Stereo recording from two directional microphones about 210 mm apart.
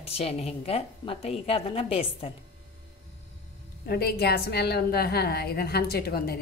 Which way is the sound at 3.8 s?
50° left (ahead or behind).